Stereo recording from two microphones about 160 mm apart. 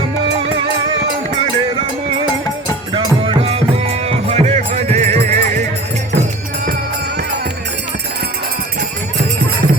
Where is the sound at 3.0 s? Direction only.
35° right (ahead or behind).